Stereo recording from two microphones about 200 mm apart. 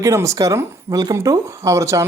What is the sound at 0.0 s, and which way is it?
Speech, 15° right (ahead or behind).